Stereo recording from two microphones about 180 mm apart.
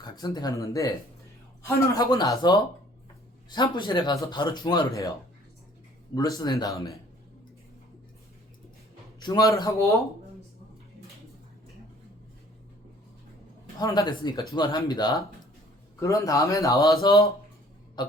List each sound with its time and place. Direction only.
0.0 s speech: 20° left (ahead or behind)
6.1 s speech: 20° left (ahead or behind)
9.2 s speech: 20° left (ahead or behind)
13.7 s a man's voice: 20° left (ahead or behind)